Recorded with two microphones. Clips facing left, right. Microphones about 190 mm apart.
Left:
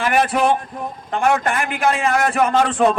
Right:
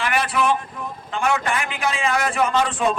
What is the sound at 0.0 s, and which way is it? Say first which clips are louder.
A man's voice: left 5 dB; 45° left (ahead or behind).